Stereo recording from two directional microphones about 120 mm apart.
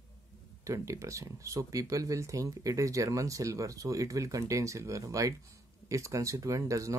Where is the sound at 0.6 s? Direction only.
25° right (ahead or behind).